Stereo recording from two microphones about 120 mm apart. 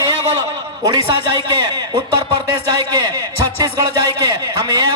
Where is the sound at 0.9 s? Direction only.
35° right (ahead or behind).